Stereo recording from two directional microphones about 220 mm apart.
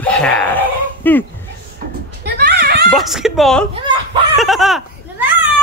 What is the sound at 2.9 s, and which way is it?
Speech, centre (ahead or behind).